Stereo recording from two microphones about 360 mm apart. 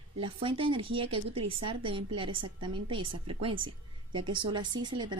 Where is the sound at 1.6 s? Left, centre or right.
Centre.